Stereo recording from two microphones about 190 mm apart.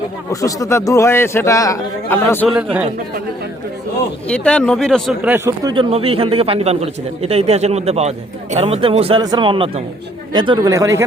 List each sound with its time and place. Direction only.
0.3 s a man's voice: 15° left (ahead or behind)
2.5 s speech: 5° right (ahead or behind)
4.3 s speech: 5° left (ahead or behind)
5.6 s a man's voice: 25° right (ahead or behind)